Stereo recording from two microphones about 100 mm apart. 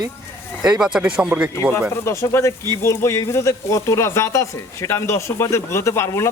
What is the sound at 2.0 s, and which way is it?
Speech, 30° left (ahead or behind).